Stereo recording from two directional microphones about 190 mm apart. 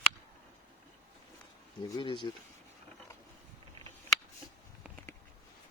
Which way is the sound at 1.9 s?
25° left (ahead or behind).